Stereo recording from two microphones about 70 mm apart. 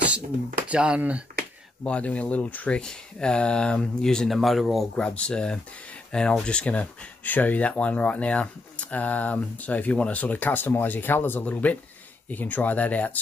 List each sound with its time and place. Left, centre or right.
0.7 s speech: centre
1.8 s speech: centre
2.8 s speech: centre
4.9 s speech: centre